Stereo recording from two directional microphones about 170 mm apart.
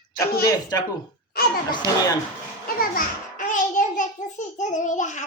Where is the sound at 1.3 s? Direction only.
65° left (ahead or behind).